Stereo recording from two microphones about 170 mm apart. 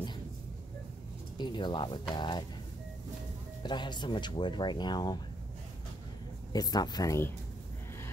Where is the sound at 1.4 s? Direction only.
25° left (ahead or behind).